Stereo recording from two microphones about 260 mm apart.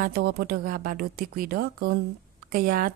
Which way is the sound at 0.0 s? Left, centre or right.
Right.